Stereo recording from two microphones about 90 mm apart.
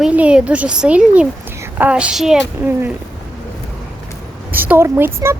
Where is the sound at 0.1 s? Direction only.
15° right (ahead or behind).